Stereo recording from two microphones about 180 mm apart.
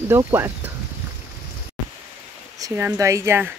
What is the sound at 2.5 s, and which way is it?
Speech, 15° right (ahead or behind).